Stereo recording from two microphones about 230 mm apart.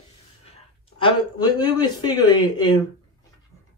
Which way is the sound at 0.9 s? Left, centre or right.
Centre.